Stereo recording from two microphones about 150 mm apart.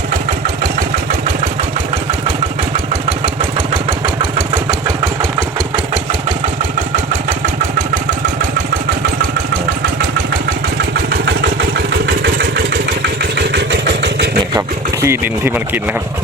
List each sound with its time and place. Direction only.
0.1 s engine: 60° right (ahead or behind)
3.8 s engine: 25° right (ahead or behind)
5.7 s engine: 40° right (ahead or behind)
15.0 s speech: 15° right (ahead or behind)